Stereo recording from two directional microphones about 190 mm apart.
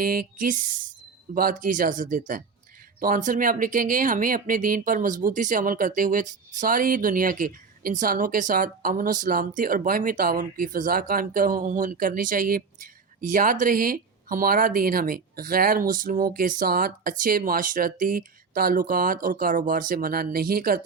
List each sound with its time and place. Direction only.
0.0 s speech: 50° right (ahead or behind)